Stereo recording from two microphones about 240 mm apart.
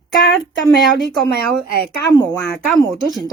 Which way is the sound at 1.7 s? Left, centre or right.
Right.